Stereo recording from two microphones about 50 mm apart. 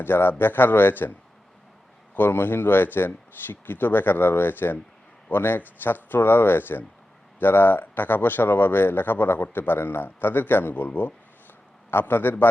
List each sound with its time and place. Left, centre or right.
0.0 s speech: left
2.1 s speech: left